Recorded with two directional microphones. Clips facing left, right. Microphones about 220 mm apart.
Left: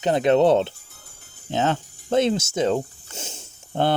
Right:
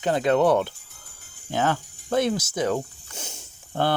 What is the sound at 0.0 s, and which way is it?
Speech, 20° left (ahead or behind).